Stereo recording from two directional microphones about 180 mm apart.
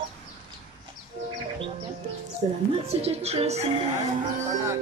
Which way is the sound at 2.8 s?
35° right (ahead or behind).